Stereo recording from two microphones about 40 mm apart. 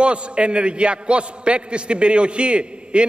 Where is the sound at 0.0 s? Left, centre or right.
Right.